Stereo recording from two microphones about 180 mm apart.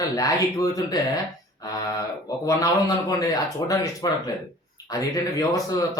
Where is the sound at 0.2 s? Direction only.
20° left (ahead or behind).